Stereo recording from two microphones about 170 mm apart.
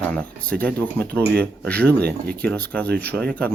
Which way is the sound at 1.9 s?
70° right (ahead or behind).